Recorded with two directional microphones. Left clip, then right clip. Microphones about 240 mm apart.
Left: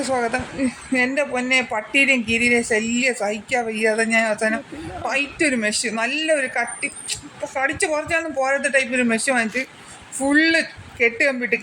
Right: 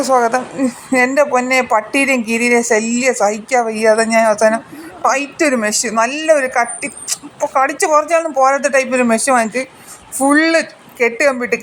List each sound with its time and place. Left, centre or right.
0.0 s speech: centre
3.1 s a woman's voice: centre
4.0 s speech: centre
4.4 s a woman's voice: centre
7.5 s speech: centre